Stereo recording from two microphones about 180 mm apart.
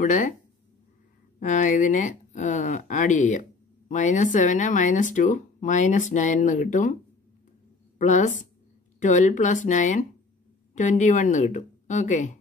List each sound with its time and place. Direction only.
0.0 s speech: 45° left (ahead or behind)
1.4 s speech: 45° left (ahead or behind)
8.0 s speech: 45° left (ahead or behind)